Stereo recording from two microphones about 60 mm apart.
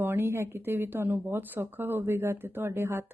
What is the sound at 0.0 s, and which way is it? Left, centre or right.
Speech, right.